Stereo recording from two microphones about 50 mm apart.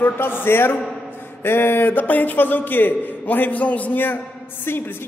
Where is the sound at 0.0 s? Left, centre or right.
Left.